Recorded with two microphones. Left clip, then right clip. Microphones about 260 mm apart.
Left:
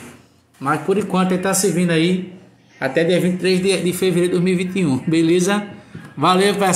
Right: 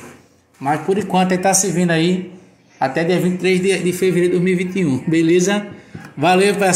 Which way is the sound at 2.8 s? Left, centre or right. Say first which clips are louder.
Even; right.